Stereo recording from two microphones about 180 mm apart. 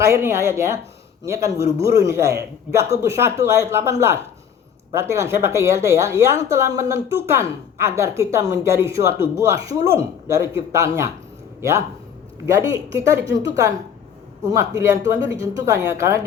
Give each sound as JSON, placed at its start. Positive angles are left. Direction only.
{"t": 0.0, "sound": "a woman's voice", "side_deg": -15}
{"t": 12.5, "sound": "a woman's voice", "side_deg": -15}